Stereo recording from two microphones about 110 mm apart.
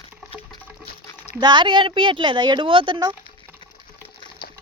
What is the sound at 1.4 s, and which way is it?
Speech, 45° right (ahead or behind).